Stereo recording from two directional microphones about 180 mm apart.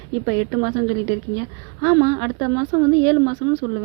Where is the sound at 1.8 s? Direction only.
25° right (ahead or behind).